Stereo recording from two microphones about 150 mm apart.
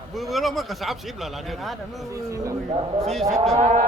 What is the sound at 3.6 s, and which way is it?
Speech, 50° right (ahead or behind).